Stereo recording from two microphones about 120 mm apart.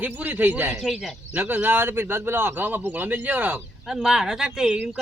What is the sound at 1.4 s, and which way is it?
A man's voice, 15° right (ahead or behind).